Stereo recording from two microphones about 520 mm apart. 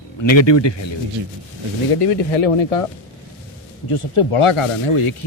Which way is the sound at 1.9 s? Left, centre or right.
Left.